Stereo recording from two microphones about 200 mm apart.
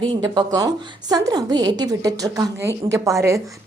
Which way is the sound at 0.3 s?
20° right (ahead or behind).